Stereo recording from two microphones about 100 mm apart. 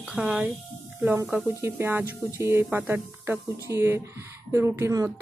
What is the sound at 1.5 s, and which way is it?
Speech, 25° right (ahead or behind).